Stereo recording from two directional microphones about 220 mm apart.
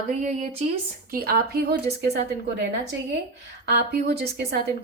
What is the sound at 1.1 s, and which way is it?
Speech, 40° right (ahead or behind).